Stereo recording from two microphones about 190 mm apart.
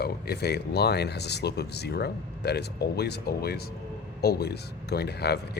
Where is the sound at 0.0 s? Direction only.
55° left (ahead or behind).